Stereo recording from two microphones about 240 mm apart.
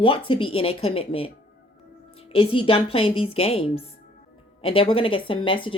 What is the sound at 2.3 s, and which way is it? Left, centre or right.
Speech, left.